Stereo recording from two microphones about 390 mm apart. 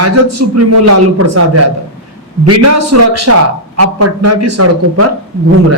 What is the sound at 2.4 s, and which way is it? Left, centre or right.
A man's voice, right.